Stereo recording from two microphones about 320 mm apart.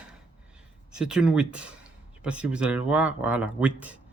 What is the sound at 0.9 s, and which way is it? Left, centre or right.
Speech, centre.